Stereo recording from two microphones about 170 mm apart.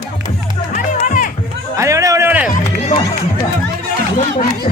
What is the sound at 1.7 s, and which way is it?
Music, 20° right (ahead or behind).